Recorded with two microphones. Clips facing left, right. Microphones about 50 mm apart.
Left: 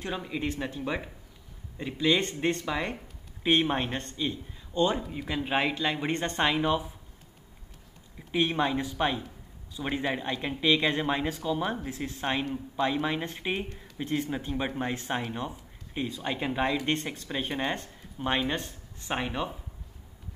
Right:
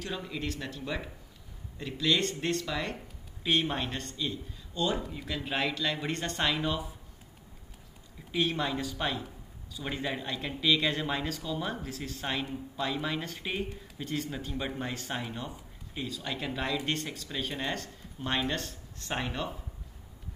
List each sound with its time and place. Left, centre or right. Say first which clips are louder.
0.0 s speech: left 4 dB; left
8.3 s speech: left 4 dB; left